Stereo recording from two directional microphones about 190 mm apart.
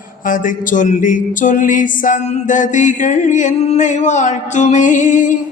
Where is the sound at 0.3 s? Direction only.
45° left (ahead or behind).